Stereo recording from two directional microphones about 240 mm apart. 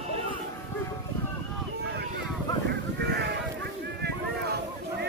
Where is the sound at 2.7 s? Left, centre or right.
Right.